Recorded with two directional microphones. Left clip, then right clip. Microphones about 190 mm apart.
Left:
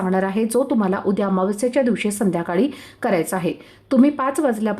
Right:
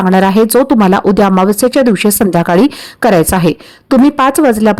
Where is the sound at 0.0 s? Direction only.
40° right (ahead or behind).